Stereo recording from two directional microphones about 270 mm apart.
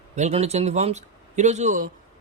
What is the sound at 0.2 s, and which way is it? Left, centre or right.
A man's voice, right.